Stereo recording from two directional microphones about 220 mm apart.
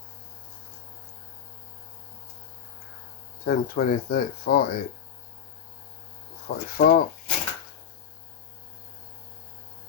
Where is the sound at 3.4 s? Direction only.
40° left (ahead or behind).